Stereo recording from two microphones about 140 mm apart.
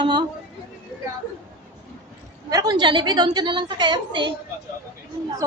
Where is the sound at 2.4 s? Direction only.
30° right (ahead or behind).